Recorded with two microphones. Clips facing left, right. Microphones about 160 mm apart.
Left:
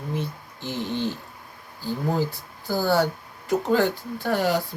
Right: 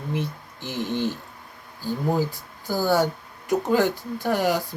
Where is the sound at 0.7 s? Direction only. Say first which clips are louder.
Right 1 dB; 15° right (ahead or behind).